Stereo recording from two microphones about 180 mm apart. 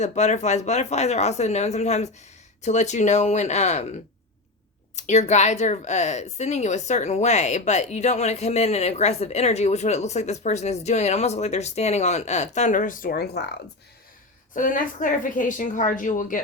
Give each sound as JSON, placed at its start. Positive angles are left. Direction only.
{"t": 0.0, "sound": "speech", "side_deg": 40}
{"t": 4.9, "sound": "speech", "side_deg": 40}
{"t": 14.5, "sound": "a woman's voice", "side_deg": 45}